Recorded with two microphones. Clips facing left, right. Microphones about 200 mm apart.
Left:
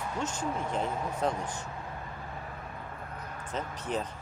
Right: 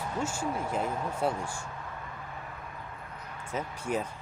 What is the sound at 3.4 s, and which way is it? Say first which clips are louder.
Speech: right 2 dB; 10° right (ahead or behind).